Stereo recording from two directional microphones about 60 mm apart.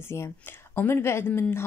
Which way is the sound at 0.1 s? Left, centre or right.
Left.